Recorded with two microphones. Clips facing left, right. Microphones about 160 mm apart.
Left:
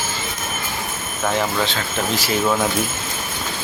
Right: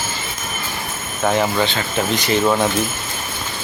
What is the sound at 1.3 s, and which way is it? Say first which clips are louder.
Speech: right 3 dB; centre (ahead or behind).